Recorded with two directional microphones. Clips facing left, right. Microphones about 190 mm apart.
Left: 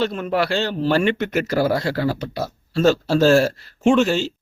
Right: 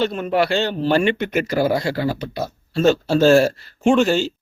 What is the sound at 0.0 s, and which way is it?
Speech, centre (ahead or behind).